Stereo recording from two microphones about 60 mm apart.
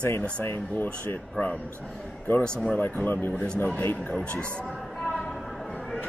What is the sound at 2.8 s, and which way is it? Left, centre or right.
Speech, left.